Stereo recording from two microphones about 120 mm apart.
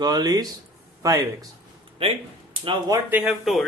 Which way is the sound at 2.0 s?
50° right (ahead or behind).